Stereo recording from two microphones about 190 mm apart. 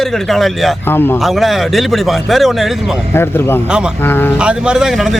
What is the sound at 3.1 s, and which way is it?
Speech, 10° left (ahead or behind).